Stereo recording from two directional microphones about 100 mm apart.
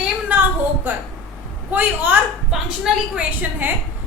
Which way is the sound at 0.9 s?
20° right (ahead or behind).